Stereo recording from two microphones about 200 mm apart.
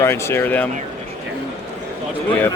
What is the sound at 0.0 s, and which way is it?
Speech, 15° left (ahead or behind).